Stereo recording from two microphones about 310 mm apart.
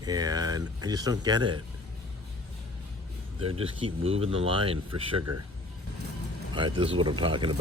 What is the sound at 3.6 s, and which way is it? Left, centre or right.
Speech, centre.